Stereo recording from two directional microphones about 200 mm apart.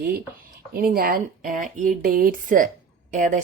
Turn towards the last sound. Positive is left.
turn(degrees=-40)  # may be behind; listen again after turning